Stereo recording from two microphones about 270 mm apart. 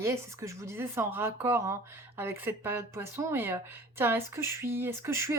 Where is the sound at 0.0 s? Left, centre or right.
Centre.